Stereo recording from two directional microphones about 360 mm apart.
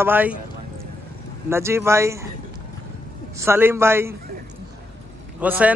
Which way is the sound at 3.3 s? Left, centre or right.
Centre.